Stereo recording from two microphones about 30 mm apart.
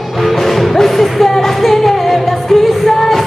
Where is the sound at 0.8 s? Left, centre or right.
Centre.